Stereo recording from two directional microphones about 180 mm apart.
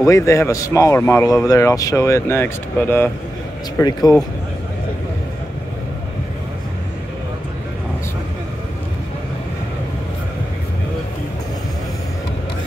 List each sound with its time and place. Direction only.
0.0 s speech: 15° left (ahead or behind)